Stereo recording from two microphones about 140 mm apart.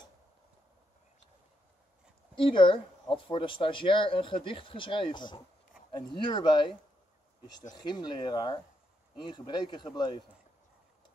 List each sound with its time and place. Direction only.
2.3 s speech: 35° left (ahead or behind)
7.7 s speech: 30° left (ahead or behind)